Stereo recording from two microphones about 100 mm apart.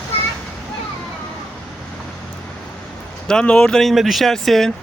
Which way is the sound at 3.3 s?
10° left (ahead or behind).